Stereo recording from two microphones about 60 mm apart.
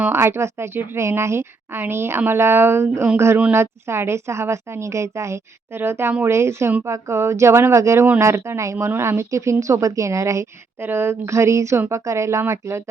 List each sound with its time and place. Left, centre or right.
0.1 s a woman's voice: right
10.8 s a woman's voice: right